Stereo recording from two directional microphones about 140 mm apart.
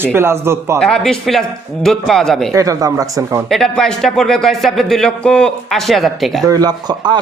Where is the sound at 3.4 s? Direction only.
5° left (ahead or behind).